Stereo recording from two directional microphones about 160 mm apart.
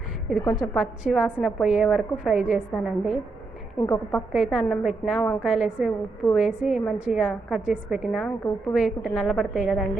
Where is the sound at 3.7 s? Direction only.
20° left (ahead or behind).